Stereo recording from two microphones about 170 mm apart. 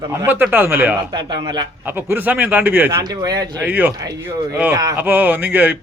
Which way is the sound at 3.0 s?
25° right (ahead or behind).